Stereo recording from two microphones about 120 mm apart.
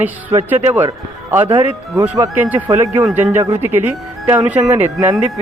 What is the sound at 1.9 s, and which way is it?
A man's voice, 10° right (ahead or behind).